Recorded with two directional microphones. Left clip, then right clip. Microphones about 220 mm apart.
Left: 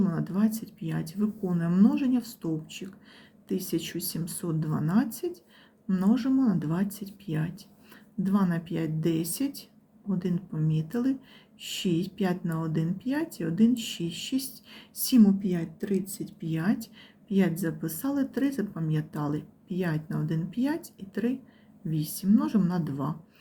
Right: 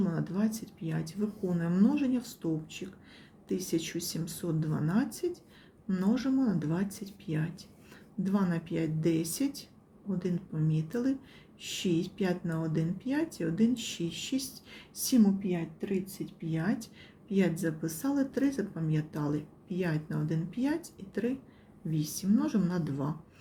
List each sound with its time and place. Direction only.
0.0 s speech: 15° left (ahead or behind)
3.5 s speech: 15° left (ahead or behind)